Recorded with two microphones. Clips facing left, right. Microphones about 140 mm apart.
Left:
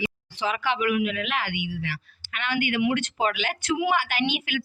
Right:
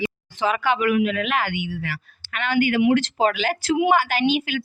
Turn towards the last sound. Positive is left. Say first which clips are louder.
# right 6 dB
turn(degrees=-35)  # may be behind; listen again after turning